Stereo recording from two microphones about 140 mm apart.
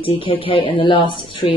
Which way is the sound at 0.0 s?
40° left (ahead or behind).